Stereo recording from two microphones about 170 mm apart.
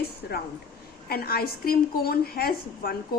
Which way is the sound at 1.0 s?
65° left (ahead or behind).